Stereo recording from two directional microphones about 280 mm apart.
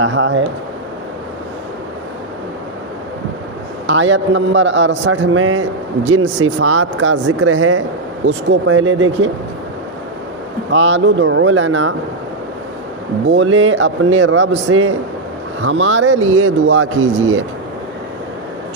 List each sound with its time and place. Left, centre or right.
0.0 s a man's voice: right
3.8 s a man's voice: right
10.7 s a man's voice: right
13.2 s a man's voice: right